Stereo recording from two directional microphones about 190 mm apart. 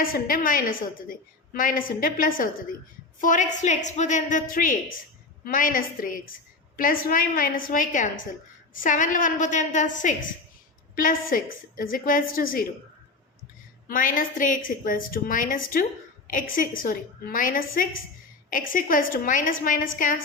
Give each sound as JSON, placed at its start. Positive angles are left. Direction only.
{"t": 0.0, "sound": "a woman's voice", "side_deg": 50}
{"t": 13.8, "sound": "a woman's voice", "side_deg": 45}